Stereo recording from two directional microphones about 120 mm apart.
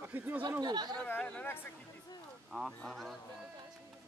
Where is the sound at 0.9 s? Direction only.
15° left (ahead or behind).